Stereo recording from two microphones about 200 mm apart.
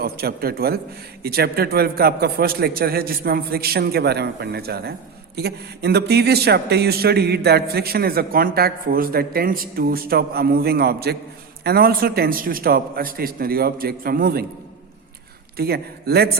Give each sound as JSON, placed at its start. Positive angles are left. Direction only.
{"t": 0.0, "sound": "speech", "side_deg": -50}
{"t": 15.5, "sound": "speech", "side_deg": -50}